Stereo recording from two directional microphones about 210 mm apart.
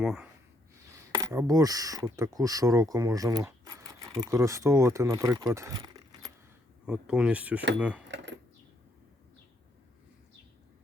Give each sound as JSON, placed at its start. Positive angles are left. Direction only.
{"t": 0.0, "sound": "speech", "side_deg": 0}
{"t": 1.2, "sound": "speech", "side_deg": -15}
{"t": 6.8, "sound": "speech", "side_deg": -5}
{"t": 8.0, "sound": "keys jangling", "side_deg": -60}